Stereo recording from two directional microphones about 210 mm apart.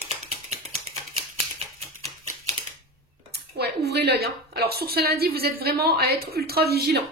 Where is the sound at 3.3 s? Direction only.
50° right (ahead or behind).